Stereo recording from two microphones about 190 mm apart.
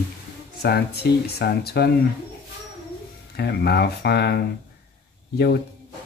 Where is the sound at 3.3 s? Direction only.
60° left (ahead or behind).